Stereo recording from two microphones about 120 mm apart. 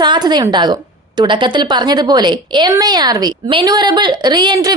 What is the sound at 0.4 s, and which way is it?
A woman's voice, 35° right (ahead or behind).